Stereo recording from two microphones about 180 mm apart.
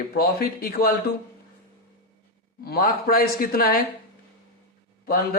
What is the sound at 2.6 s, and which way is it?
A man's voice, 55° left (ahead or behind).